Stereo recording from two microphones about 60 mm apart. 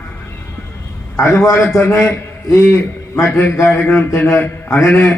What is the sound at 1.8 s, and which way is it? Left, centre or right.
A man's voice, left.